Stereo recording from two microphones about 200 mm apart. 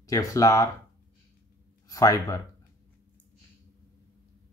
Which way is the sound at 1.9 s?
15° left (ahead or behind).